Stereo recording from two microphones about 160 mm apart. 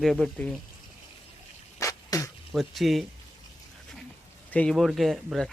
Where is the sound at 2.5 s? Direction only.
Centre (ahead or behind).